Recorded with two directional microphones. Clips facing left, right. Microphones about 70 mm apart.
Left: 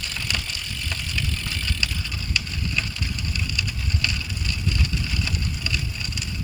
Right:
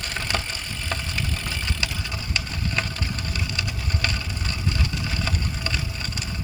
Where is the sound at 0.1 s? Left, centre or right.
Right.